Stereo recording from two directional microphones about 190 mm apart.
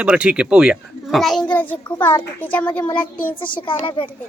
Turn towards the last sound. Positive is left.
turn(degrees=25)  # may be behind; listen again after turning